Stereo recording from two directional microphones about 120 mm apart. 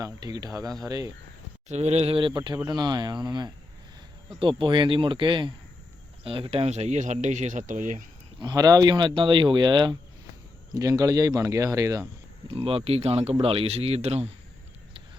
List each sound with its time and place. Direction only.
0.0 s speech: 30° right (ahead or behind)
1.6 s speech: 65° right (ahead or behind)
2.1 s speech: 40° right (ahead or behind)
4.4 s speech: 45° right (ahead or behind); by 8.0 s 90° right
8.4 s speech: 35° right (ahead or behind)
12.5 s a man's voice: 50° right (ahead or behind)